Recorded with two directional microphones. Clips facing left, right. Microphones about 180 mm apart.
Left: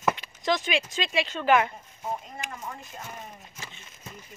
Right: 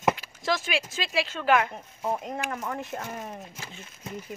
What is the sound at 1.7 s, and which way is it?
Speech, 70° right (ahead or behind).